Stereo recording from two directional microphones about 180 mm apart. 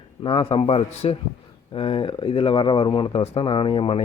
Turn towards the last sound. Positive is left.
turn(degrees=30)  # may be behind; listen again after turning